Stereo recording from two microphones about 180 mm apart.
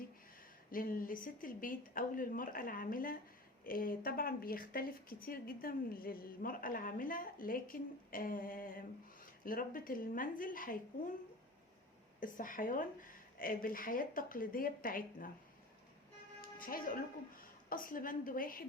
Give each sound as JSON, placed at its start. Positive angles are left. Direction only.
{"t": 0.7, "sound": "speech", "side_deg": 50}
{"t": 12.2, "sound": "speech", "side_deg": 50}
{"t": 16.4, "sound": "music", "side_deg": 50}
{"t": 17.7, "sound": "speech", "side_deg": 50}